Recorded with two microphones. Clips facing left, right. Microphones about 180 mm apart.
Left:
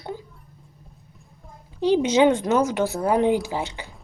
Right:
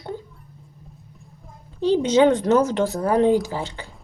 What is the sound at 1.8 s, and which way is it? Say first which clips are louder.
Speech: right 1 dB; 15° left (ahead or behind).